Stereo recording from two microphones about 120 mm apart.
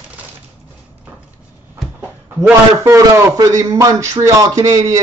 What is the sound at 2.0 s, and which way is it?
A man's voice, 20° right (ahead or behind).